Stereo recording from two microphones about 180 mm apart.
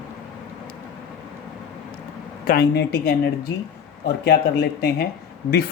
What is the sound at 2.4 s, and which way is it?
A woman's voice, 60° left (ahead or behind).